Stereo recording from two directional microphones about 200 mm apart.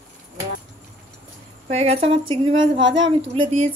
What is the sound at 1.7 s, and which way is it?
A woman's voice, 30° right (ahead or behind).